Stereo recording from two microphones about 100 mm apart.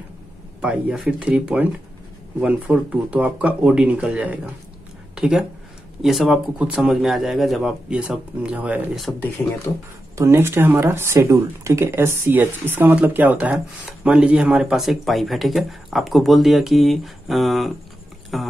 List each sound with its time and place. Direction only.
0.6 s speech: 10° right (ahead or behind)
5.1 s a sound: 5° right (ahead or behind)
6.0 s speech: centre (ahead or behind)
10.1 s speech: 25° right (ahead or behind); by 18.5 s centre (ahead or behind)